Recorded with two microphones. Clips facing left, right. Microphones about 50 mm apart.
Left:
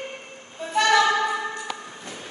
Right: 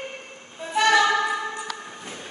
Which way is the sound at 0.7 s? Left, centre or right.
Centre.